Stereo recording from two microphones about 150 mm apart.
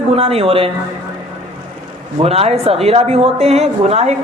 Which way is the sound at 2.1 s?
40° right (ahead or behind).